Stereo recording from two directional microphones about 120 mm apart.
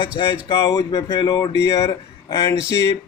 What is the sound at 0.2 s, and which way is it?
A man's voice, 40° left (ahead or behind).